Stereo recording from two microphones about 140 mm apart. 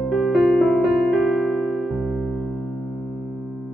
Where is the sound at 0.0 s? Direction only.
Centre (ahead or behind).